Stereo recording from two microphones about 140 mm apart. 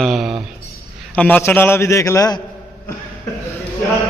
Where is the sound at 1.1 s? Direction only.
10° left (ahead or behind); by 2.4 s 25° left (ahead or behind).